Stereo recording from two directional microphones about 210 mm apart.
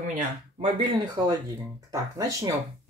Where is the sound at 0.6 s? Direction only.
20° right (ahead or behind).